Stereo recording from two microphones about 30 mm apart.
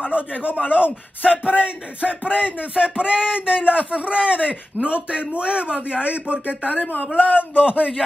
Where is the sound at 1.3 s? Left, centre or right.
Right.